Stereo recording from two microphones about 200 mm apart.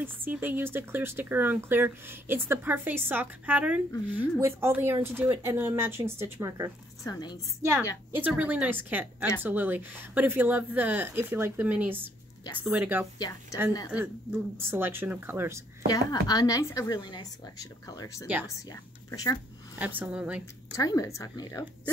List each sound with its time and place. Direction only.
0.0 s speech: 10° right (ahead or behind)
7.1 s a woman's voice: 20° left (ahead or behind)
7.6 s speech: 15° right (ahead or behind)
13.2 s a woman's voice: 15° left (ahead or behind)
13.9 s speech: 10° right (ahead or behind)
15.9 s a woman's voice: 20° left (ahead or behind)
19.7 s speech: 10° right (ahead or behind)
20.7 s a woman's voice: 15° left (ahead or behind)